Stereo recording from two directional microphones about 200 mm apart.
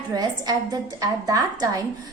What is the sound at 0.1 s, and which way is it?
A woman's voice, 20° right (ahead or behind).